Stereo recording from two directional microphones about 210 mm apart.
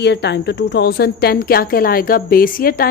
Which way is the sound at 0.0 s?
55° left (ahead or behind).